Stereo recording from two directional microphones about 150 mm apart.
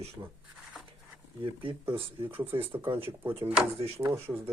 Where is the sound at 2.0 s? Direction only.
35° right (ahead or behind).